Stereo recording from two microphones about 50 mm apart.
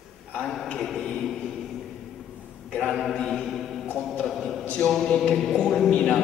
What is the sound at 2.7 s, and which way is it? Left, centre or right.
Mantra, left.